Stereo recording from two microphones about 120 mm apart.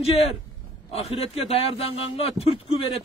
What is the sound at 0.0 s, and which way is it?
A man's voice, 55° left (ahead or behind).